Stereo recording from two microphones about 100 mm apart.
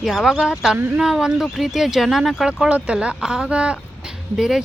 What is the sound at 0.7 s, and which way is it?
Speech, 20° right (ahead or behind).